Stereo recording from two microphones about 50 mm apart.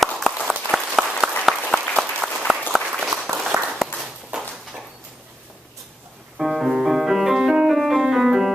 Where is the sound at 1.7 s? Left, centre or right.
Centre.